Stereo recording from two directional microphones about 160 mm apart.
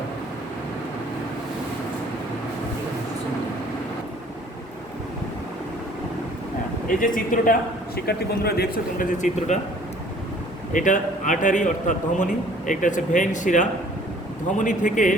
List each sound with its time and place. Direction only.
7.0 s speech: 55° left (ahead or behind)
7.9 s speech: 80° left; by 9.6 s 50° left (ahead or behind)
10.7 s a man's voice: 55° left (ahead or behind)